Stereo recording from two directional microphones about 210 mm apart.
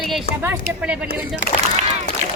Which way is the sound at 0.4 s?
5° right (ahead or behind).